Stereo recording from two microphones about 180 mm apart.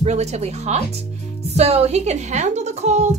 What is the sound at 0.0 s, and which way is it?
A woman's voice, 35° right (ahead or behind).